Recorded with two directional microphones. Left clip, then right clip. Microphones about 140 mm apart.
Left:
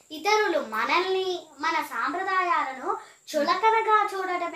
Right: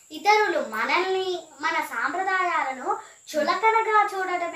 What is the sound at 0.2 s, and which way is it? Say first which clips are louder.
A child's voice: right 3 dB; 15° left (ahead or behind).